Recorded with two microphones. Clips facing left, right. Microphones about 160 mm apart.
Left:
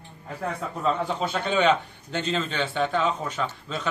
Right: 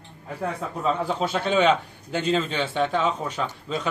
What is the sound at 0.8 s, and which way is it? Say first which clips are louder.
A man's voice: right 1 dB; 5° right (ahead or behind).